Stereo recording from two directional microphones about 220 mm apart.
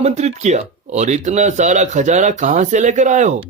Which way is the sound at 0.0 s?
30° right (ahead or behind).